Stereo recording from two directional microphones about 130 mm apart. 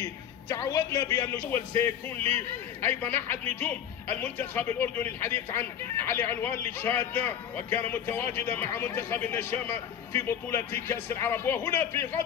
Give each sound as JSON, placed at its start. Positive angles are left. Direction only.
{"t": 0.0, "sound": "a man's voice", "side_deg": 30}
{"t": 1.8, "sound": "a man's voice", "side_deg": 15}